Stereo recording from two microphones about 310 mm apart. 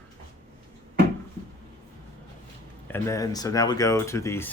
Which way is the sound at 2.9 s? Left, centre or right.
Centre.